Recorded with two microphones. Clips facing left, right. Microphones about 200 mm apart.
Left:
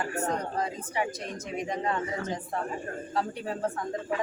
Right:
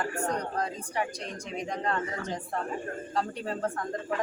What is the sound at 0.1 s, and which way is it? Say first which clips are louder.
Speech: left 1 dB; 20° left (ahead or behind).